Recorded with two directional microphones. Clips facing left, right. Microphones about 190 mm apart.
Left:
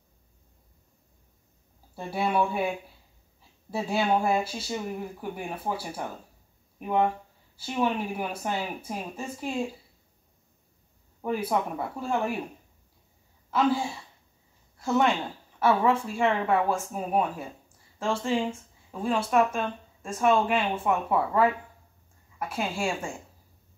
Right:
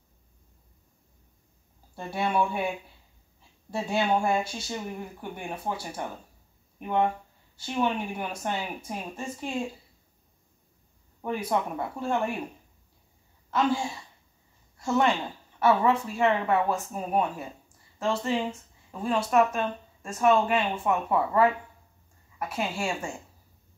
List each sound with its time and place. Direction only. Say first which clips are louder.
2.0 s speech: left 1 dB; 5° left (ahead or behind)
3.7 s speech: even; 5° left (ahead or behind)
11.1 s speech: left 1 dB; 5° left (ahead or behind)
13.5 s speech: left 1 dB; 5° left (ahead or behind)